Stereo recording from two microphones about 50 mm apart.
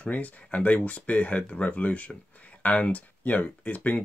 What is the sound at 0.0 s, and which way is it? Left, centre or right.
Speech, left.